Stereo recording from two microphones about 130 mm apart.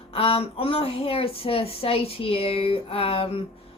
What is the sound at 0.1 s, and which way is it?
Speech, 45° left (ahead or behind).